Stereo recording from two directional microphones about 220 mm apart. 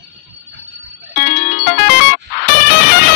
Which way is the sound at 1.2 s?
40° left (ahead or behind).